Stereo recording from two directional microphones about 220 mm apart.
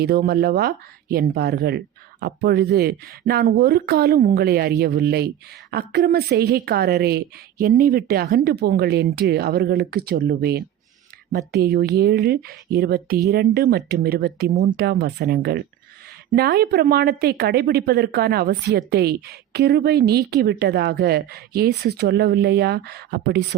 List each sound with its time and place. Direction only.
0.0 s speech: 45° right (ahead or behind)